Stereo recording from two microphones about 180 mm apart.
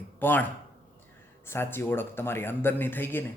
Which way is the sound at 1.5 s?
10° left (ahead or behind).